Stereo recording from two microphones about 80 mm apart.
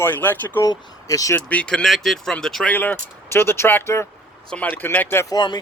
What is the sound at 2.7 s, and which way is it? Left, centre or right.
Speech, left.